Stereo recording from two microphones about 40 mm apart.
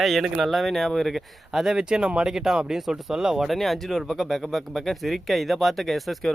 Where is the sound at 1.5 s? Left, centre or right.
Centre.